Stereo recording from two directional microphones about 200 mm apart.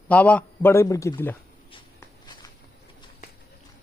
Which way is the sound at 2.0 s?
20° left (ahead or behind).